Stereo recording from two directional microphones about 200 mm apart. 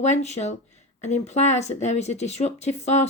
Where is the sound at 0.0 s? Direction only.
35° left (ahead or behind).